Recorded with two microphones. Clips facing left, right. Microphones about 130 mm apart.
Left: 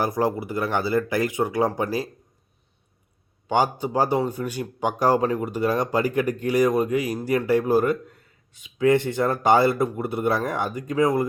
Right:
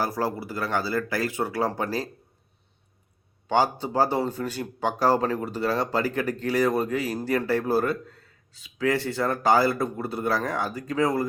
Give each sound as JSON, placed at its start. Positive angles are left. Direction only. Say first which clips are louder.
{"t": 0.0, "sound": "speech", "louder": "left 4 dB", "side_deg": 20}
{"t": 3.5, "sound": "speech", "louder": "left 1 dB", "side_deg": 15}